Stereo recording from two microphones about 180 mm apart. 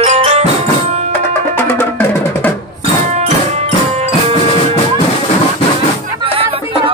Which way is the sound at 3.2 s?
35° right (ahead or behind).